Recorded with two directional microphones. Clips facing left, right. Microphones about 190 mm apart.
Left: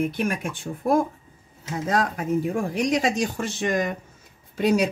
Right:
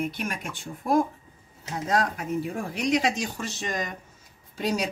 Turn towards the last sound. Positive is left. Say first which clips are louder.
# left 7 dB
turn(degrees=55)  # may be behind; listen again after turning